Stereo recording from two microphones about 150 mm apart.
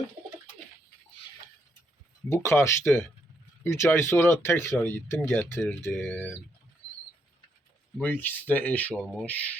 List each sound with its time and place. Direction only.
2.3 s speech: 15° left (ahead or behind)
7.9 s speech: 10° left (ahead or behind)